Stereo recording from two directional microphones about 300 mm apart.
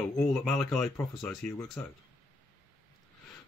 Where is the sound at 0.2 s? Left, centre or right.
Centre.